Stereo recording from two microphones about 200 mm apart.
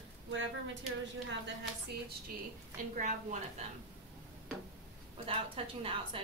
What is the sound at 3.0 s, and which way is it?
Speech, 35° right (ahead or behind).